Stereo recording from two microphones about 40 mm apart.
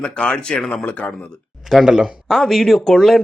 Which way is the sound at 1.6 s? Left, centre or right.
Centre.